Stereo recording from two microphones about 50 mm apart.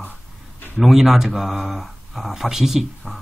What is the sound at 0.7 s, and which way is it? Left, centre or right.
Speech, centre.